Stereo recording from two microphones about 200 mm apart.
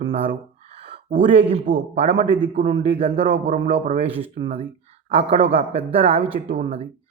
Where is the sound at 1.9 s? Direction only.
30° right (ahead or behind).